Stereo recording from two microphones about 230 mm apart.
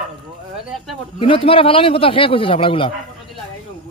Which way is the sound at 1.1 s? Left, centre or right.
Left.